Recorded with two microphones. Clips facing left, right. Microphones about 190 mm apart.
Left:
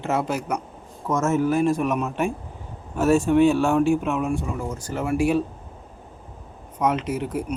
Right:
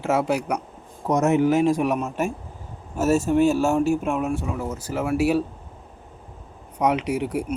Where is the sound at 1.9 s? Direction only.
40° right (ahead or behind).